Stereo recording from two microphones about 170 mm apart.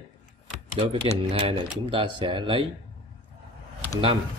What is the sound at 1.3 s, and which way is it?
A man's voice, 30° right (ahead or behind).